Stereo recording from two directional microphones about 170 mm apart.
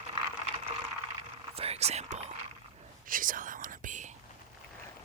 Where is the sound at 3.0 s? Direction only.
55° right (ahead or behind).